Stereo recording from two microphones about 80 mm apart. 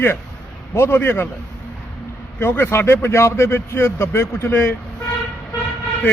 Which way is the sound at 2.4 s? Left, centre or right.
Left.